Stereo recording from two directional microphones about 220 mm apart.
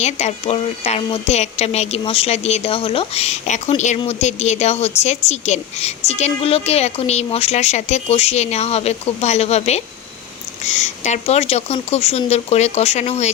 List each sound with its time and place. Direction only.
0.0 s a woman's voice: 30° left (ahead or behind)